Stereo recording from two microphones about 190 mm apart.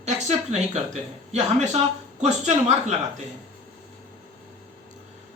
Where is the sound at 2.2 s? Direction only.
35° right (ahead or behind).